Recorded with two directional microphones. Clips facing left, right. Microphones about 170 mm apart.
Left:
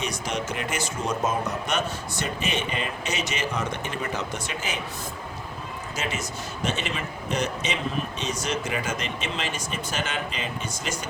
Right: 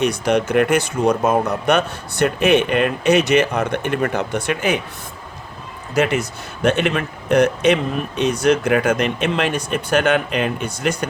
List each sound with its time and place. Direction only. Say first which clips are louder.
0.0 s a man's voice: right 12 dB; 60° right (ahead or behind)
5.9 s a man's voice: right 14 dB; 60° right (ahead or behind)